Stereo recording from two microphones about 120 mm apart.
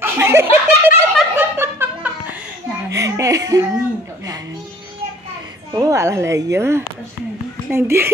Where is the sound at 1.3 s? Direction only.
20° right (ahead or behind).